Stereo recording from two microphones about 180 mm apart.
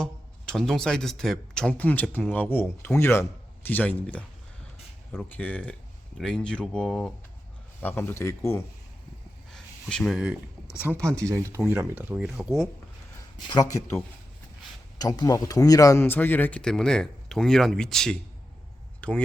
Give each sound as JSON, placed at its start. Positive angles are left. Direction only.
{"t": 0.0, "sound": "speech", "side_deg": 5}
{"t": 9.5, "sound": "a sound", "side_deg": 0}
{"t": 10.9, "sound": "speech", "side_deg": -5}
{"t": 13.5, "sound": "speech", "side_deg": 20}